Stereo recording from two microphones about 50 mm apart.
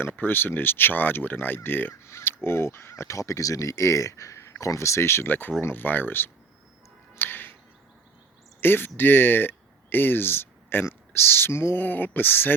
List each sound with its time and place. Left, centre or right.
0.0 s speech: left
1.9 s speech: left
5.3 s speech: left
7.2 s music: left
8.6 s speech: left